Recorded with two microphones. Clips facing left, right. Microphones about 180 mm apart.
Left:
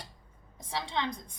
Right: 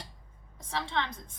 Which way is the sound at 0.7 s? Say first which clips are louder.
Even; 15° left (ahead or behind).